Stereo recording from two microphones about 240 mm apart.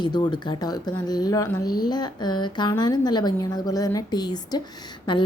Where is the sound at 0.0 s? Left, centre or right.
Centre.